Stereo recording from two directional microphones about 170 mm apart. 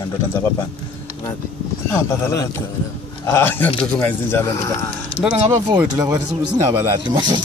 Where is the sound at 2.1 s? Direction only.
15° left (ahead or behind).